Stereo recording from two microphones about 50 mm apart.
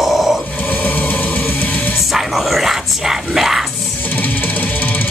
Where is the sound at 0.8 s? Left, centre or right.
Left.